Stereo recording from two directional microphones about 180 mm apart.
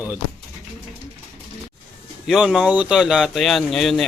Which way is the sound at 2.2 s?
5° right (ahead or behind).